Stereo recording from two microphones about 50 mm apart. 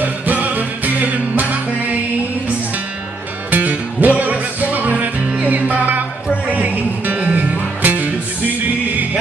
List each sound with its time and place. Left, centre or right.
0.0 s music: right
3.5 s music: right